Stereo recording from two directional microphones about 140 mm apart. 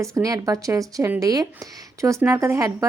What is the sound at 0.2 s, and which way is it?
A woman's voice, 25° right (ahead or behind).